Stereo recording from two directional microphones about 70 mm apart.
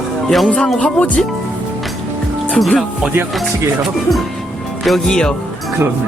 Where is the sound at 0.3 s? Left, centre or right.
Centre.